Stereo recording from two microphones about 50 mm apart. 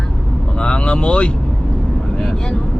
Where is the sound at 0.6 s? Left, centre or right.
Centre.